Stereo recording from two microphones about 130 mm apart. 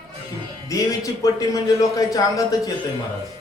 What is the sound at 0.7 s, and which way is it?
Speech, 25° left (ahead or behind).